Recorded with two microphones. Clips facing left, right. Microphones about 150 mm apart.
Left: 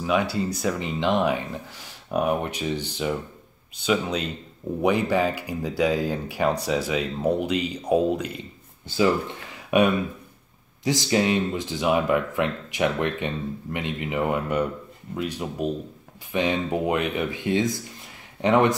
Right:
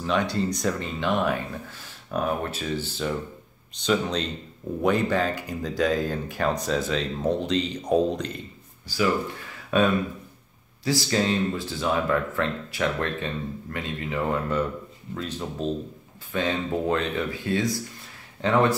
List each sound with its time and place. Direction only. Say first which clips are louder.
0.0 s speech: left 1 dB; 10° left (ahead or behind)
8.8 s speech: left 3 dB; 25° left (ahead or behind)